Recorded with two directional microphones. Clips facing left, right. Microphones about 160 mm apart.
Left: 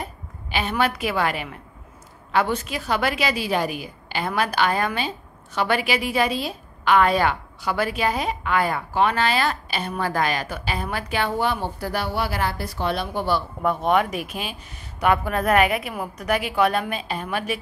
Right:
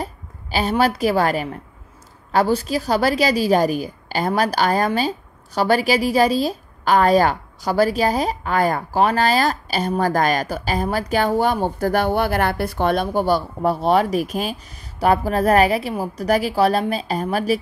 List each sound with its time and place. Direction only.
0.0 s a woman's voice: 35° right (ahead or behind)